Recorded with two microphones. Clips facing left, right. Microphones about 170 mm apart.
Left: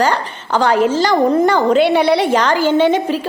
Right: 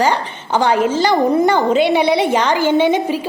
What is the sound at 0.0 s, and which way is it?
A woman's voice, 15° right (ahead or behind).